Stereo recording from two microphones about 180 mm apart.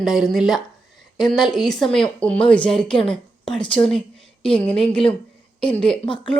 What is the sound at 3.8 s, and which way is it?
A woman's voice, 5° left (ahead or behind).